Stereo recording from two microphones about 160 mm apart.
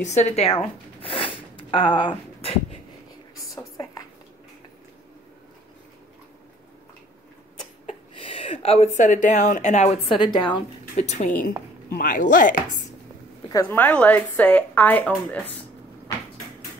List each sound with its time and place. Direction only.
0.0 s zipper: 45° left (ahead or behind)
3.5 s a sound: 20° left (ahead or behind)
7.8 s a woman's voice: 35° left (ahead or behind)
11.0 s a woman's voice: 45° left (ahead or behind)
11.9 s speech: 60° left (ahead or behind)
13.5 s speech: 20° left (ahead or behind)
13.7 s speech: 10° left (ahead or behind)